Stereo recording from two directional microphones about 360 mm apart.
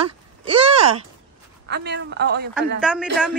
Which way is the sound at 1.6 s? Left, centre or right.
Right.